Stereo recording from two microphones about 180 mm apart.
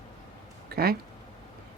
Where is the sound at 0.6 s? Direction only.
55° right (ahead or behind).